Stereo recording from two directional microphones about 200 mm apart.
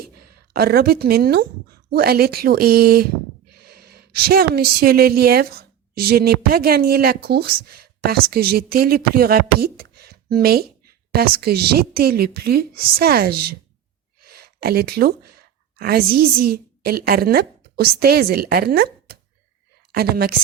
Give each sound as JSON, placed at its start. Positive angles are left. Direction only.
{"t": 0.5, "sound": "a woman's voice", "side_deg": -50}
{"t": 14.2, "sound": "a sound", "side_deg": -50}
{"t": 15.8, "sound": "a woman's voice", "side_deg": -50}